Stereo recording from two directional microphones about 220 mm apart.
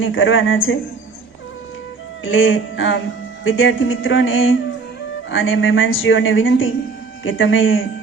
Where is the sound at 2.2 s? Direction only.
60° left (ahead or behind).